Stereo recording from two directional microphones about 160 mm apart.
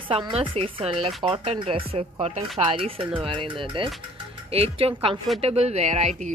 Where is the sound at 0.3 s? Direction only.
35° right (ahead or behind).